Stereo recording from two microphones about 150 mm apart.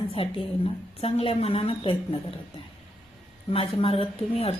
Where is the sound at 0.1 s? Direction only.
40° left (ahead or behind).